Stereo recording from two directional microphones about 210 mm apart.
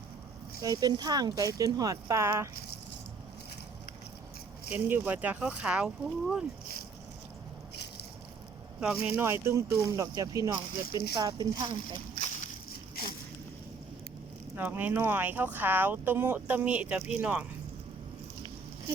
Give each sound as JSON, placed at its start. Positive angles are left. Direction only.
{"t": 0.6, "sound": "speech", "side_deg": -20}
{"t": 4.7, "sound": "speech", "side_deg": -10}
{"t": 8.8, "sound": "speech", "side_deg": -10}
{"t": 14.5, "sound": "speech", "side_deg": -10}